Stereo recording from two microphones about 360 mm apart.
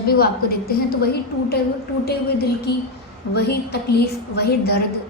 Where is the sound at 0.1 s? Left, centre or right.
Left.